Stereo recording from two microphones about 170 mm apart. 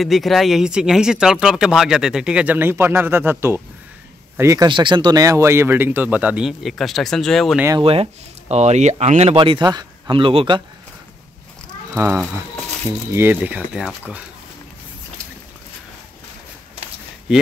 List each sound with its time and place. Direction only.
0.0 s speech: centre (ahead or behind); by 4.6 s 15° right (ahead or behind)
4.6 s speech: 25° right (ahead or behind); by 7.6 s centre (ahead or behind)
7.8 s speech: 35° right (ahead or behind)
13.1 s speech: 15° right (ahead or behind)